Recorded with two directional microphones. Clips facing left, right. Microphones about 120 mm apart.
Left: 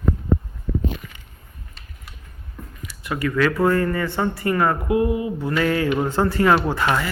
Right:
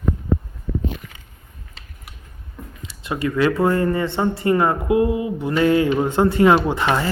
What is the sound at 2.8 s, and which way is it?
Speech, 25° right (ahead or behind).